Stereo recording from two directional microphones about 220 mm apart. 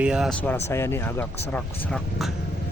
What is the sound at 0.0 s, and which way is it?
Speech, 5° right (ahead or behind).